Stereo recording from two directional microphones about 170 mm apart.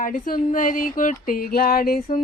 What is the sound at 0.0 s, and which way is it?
Speech, 55° left (ahead or behind).